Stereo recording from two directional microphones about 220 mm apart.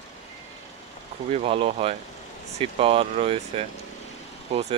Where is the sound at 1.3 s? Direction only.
25° right (ahead or behind).